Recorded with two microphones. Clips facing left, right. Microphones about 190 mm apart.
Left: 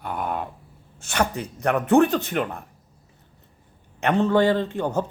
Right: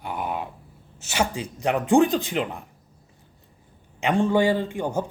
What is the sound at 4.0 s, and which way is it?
Speech, 10° right (ahead or behind).